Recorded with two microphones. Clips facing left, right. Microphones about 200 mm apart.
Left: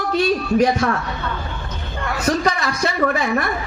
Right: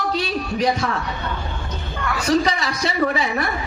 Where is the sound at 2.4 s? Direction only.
50° left (ahead or behind).